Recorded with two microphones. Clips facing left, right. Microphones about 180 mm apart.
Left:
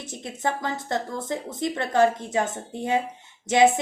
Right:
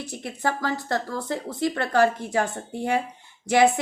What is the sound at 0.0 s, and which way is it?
A woman's voice, 20° left (ahead or behind).